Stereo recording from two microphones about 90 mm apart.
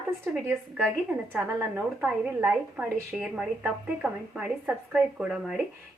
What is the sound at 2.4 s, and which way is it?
A woman's voice, 10° right (ahead or behind).